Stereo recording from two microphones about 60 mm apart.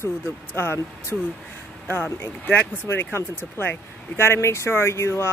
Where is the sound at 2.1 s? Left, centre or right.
Left.